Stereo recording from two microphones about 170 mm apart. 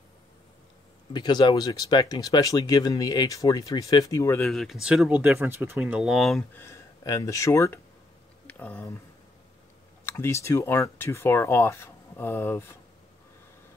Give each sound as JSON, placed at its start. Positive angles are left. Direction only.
{"t": 1.1, "sound": "speech", "side_deg": 25}
{"t": 4.5, "sound": "speech", "side_deg": 0}
{"t": 6.5, "sound": "speech", "side_deg": 15}
{"t": 8.5, "sound": "a sound", "side_deg": 10}
{"t": 10.0, "sound": "speech", "side_deg": 15}